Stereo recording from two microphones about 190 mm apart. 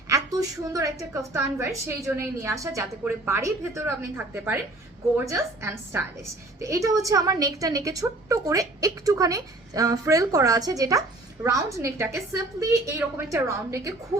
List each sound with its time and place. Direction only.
0.1 s a woman's voice: 20° right (ahead or behind)